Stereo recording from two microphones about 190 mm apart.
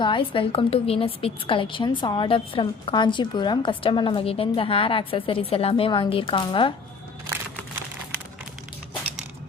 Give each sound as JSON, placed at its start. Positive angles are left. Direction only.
{"t": 0.0, "sound": "a woman's voice", "side_deg": 25}